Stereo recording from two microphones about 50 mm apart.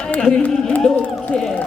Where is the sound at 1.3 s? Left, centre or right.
Centre.